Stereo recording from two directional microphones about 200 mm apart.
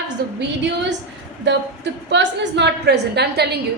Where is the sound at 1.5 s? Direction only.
65° right (ahead or behind).